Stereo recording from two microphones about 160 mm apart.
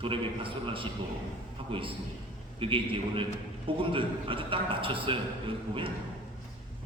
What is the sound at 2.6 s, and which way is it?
A man's voice, 35° right (ahead or behind).